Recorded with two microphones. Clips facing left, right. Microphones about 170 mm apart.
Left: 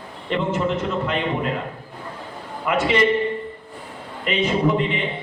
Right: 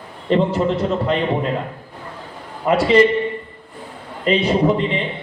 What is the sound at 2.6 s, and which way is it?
Speech, 35° right (ahead or behind).